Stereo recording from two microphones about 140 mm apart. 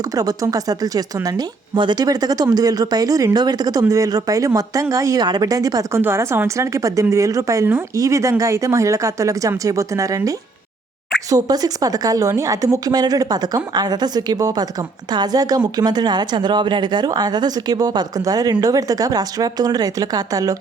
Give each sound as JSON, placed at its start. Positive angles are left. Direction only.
{"t": 0.0, "sound": "speech", "side_deg": -25}